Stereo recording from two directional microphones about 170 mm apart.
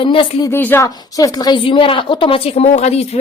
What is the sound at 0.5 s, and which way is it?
A woman's voice, 15° left (ahead or behind).